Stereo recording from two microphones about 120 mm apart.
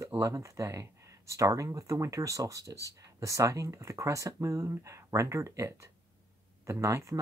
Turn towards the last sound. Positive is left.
turn(degrees=-25)  # may be behind; listen again after turning